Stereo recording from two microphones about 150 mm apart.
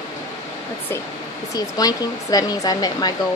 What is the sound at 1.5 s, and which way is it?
Speech, 25° left (ahead or behind).